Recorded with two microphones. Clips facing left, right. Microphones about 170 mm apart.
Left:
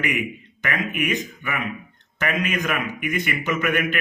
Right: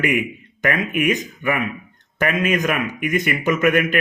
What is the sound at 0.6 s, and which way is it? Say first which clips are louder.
A man's voice: right 5 dB; 45° right (ahead or behind).